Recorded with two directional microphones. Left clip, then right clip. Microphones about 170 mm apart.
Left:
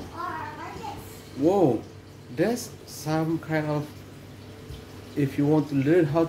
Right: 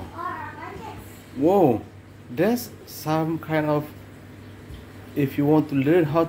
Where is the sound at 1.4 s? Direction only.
45° right (ahead or behind).